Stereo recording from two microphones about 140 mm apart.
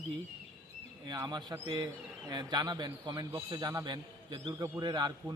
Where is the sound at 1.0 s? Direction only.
30° right (ahead or behind).